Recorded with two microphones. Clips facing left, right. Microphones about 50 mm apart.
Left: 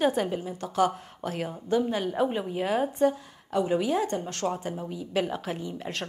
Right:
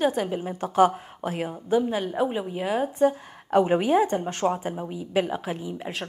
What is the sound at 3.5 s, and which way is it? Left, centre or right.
Speech, right.